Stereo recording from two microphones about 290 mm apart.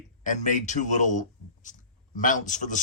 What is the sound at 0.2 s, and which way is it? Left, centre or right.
A man's voice, left.